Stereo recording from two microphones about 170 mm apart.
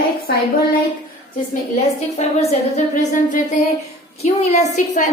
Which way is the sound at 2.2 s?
40° left (ahead or behind).